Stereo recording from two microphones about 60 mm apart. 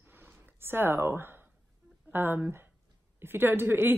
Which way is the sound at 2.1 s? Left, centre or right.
Right.